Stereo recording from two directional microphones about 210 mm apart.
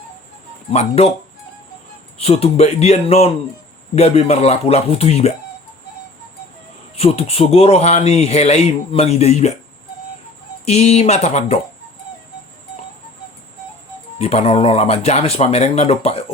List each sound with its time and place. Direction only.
0.7 s speech: 30° left (ahead or behind)
2.1 s speech: 30° left (ahead or behind)
6.9 s speech: 30° left (ahead or behind)
10.7 s speech: 30° left (ahead or behind)
14.2 s speech: 30° left (ahead or behind)